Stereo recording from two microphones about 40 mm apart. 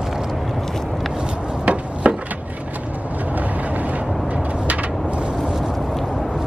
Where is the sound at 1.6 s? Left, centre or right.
Right.